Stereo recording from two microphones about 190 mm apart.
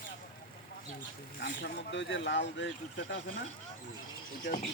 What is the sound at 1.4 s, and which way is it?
Speech, 65° left (ahead or behind).